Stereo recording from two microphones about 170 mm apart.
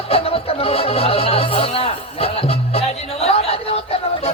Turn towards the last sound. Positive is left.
turn(degrees=35)  # may be behind; listen again after turning